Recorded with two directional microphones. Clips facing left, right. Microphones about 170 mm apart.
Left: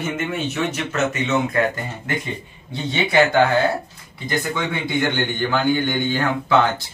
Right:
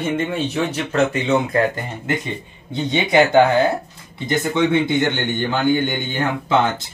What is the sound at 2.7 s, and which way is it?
Speech, 20° right (ahead or behind).